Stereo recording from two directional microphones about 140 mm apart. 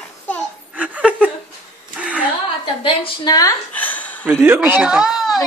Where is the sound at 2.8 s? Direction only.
35° left (ahead or behind).